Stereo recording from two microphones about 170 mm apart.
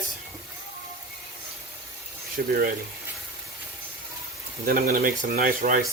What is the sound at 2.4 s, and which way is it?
Speech, 65° right (ahead or behind).